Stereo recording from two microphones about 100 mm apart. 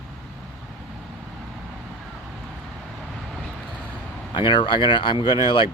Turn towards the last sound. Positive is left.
turn(degrees=55)  # may be behind; listen again after turning